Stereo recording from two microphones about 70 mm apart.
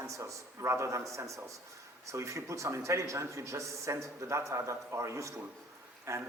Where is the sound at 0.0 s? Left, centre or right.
Right.